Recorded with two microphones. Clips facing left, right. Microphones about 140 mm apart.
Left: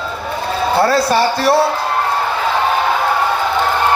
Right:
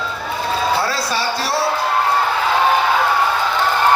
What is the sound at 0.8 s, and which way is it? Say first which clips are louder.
Speech: left 8 dB; 55° left (ahead or behind).